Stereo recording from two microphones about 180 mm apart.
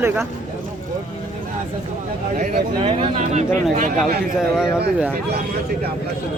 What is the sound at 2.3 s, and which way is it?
Speech, 45° right (ahead or behind).